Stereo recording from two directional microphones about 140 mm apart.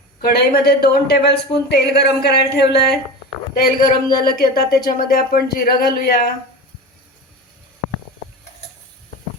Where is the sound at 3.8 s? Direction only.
90° left.